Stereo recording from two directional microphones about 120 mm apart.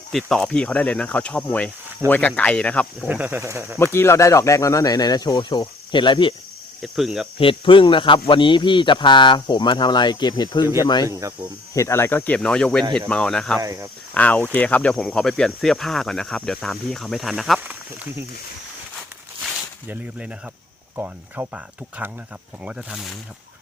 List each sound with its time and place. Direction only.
0.1 s speech: centre (ahead or behind)
3.1 s speech: 15° right (ahead or behind)
3.9 s speech: 20° left (ahead or behind); by 6.3 s 40° left (ahead or behind)
6.8 s speech: centre (ahead or behind)
7.3 s speech: 45° left (ahead or behind); by 13.6 s 5° left (ahead or behind)
13.6 s speech: 25° right (ahead or behind)
14.1 s speech: 10° left (ahead or behind)
17.6 s speech: 15° right (ahead or behind)
19.9 s speech: 10° right (ahead or behind)